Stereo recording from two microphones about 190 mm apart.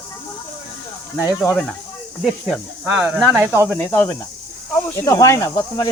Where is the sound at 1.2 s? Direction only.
15° left (ahead or behind).